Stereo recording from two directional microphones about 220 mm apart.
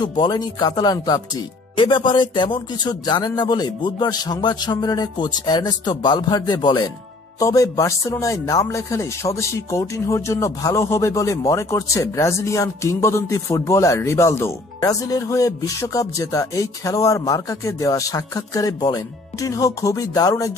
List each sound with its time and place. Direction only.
0.0 s speech: 20° left (ahead or behind)